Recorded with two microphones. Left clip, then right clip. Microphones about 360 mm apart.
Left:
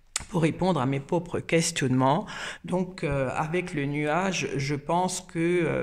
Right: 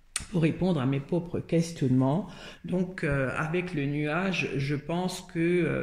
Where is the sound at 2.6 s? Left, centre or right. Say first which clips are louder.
Even; centre.